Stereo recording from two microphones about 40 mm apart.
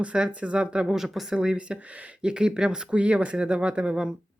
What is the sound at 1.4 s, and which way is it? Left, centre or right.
Speech, right.